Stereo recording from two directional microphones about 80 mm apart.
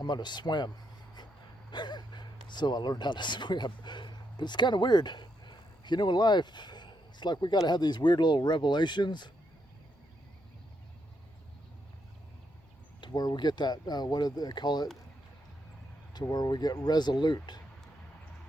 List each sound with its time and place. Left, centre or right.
0.0 s speech: left
1.7 s speech: left
13.0 s speech: left
16.3 s speech: left